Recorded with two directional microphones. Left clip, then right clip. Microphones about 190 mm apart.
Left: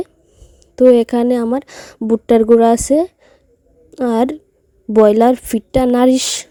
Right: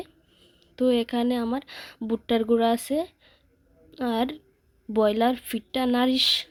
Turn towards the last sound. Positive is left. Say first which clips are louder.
# left 12 dB
turn(degrees=50)  # may be behind; listen again after turning